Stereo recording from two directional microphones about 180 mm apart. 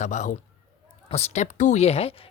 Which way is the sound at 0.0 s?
40° left (ahead or behind).